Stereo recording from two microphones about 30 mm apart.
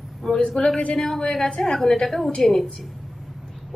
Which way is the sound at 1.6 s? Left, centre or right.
Left.